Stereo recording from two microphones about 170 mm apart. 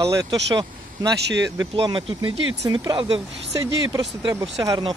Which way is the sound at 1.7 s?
30° right (ahead or behind).